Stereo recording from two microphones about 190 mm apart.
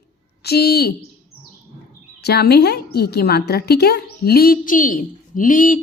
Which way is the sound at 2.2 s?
55° left (ahead or behind).